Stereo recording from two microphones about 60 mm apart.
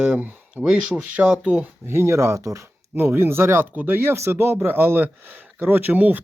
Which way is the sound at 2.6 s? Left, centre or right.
Right.